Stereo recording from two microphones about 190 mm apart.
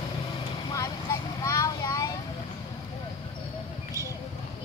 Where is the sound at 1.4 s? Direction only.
15° left (ahead or behind).